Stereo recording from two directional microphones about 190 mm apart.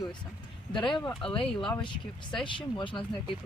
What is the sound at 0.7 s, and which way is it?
Speech, 25° left (ahead or behind).